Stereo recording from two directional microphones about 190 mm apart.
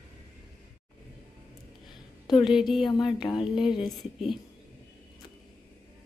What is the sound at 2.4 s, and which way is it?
Speech, centre (ahead or behind).